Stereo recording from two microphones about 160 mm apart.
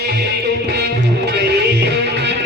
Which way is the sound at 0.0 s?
90° right.